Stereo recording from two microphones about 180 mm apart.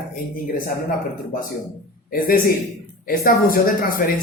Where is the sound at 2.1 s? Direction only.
55° left (ahead or behind).